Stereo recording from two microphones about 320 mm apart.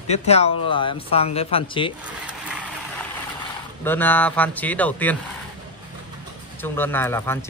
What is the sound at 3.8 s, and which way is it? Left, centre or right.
Speech, centre.